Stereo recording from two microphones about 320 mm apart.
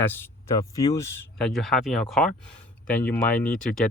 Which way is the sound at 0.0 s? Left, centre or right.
Centre.